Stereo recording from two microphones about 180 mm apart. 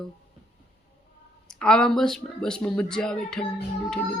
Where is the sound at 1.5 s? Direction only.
5° left (ahead or behind).